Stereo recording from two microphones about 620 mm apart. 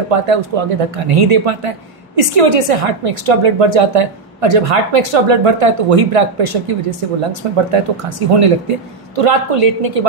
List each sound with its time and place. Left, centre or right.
0.1 s a woman's voice: right